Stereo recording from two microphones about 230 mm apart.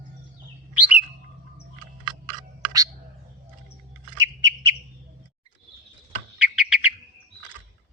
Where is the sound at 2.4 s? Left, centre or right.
Centre.